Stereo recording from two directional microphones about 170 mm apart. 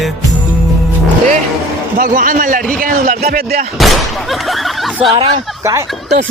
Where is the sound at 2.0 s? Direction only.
55° right (ahead or behind).